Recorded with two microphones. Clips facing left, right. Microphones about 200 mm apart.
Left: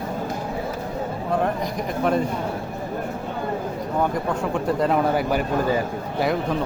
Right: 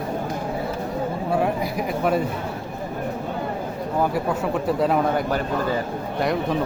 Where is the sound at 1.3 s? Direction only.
10° right (ahead or behind).